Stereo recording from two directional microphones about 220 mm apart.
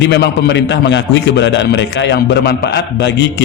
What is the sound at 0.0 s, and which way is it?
A man's voice, 50° left (ahead or behind).